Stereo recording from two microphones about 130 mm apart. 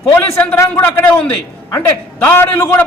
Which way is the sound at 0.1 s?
15° left (ahead or behind).